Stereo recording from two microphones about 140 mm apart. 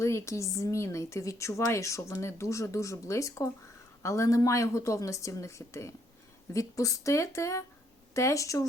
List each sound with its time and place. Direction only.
0.0 s speech: 20° left (ahead or behind)